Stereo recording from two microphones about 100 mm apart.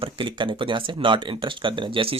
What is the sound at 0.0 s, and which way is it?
Speech, 55° right (ahead or behind).